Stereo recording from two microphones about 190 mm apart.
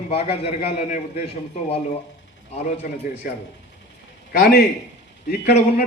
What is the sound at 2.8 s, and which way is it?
A man's voice, 45° left (ahead or behind).